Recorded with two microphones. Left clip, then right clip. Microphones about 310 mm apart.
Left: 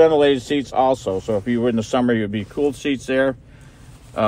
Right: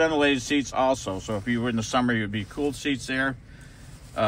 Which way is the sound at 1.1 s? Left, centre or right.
Left.